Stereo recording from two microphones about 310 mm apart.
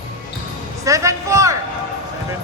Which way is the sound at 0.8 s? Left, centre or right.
Centre.